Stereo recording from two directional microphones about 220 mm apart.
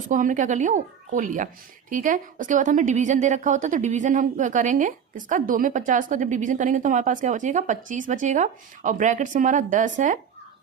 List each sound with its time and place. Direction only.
0.1 s a woman's voice: 35° right (ahead or behind)